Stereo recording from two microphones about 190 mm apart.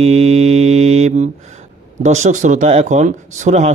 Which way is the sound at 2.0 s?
40° right (ahead or behind).